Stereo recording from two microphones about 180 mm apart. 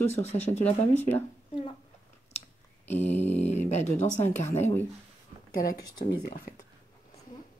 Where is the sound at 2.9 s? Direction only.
10° left (ahead or behind).